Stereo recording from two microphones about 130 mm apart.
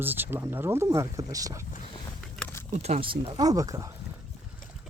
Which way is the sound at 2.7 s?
60° right (ahead or behind).